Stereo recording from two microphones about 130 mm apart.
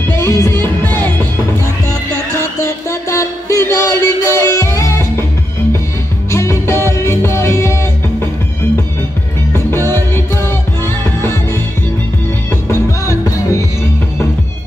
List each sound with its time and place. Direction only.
0.1 s music: 20° left (ahead or behind)
6.3 s music: 20° left (ahead or behind)
9.5 s music: 20° left (ahead or behind)
12.6 s music: 20° left (ahead or behind)